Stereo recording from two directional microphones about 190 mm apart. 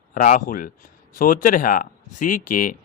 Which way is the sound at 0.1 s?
45° left (ahead or behind).